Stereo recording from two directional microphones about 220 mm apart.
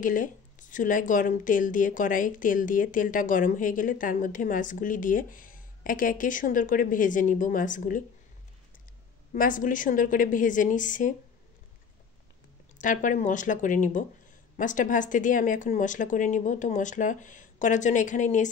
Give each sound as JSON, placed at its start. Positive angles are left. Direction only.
{"t": 0.0, "sound": "a woman's voice", "side_deg": 35}
{"t": 9.3, "sound": "a woman's voice", "side_deg": 35}
{"t": 12.7, "sound": "a woman's voice", "side_deg": 35}